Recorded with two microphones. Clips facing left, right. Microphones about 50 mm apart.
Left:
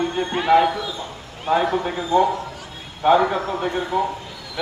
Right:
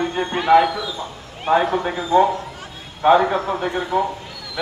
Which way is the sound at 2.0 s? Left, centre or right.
Right.